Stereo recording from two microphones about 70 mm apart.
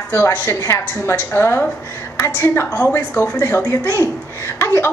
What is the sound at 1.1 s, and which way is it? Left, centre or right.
A man's voice, left.